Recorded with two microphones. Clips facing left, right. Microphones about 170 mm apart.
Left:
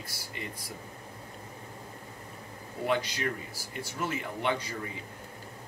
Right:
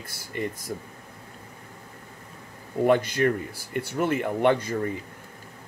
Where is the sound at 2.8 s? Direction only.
50° right (ahead or behind).